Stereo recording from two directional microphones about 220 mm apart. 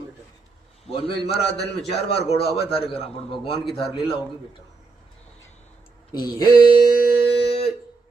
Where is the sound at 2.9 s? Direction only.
25° left (ahead or behind).